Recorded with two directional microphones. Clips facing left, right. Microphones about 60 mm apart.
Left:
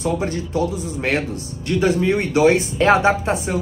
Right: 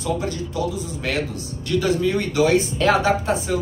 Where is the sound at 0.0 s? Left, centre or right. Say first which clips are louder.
Left 3 dB; left.